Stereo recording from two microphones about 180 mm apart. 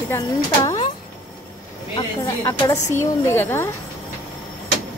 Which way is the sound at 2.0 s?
15° left (ahead or behind).